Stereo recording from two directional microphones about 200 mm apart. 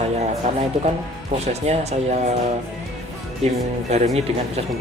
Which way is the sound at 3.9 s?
35° right (ahead or behind).